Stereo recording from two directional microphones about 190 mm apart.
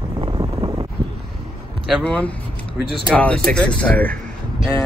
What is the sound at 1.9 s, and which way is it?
Speech, 5° left (ahead or behind).